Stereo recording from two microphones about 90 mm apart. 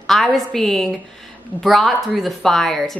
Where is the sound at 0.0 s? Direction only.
Centre (ahead or behind).